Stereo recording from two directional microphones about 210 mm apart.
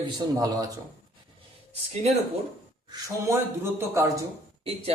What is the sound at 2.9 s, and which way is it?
A man's voice, 15° right (ahead or behind).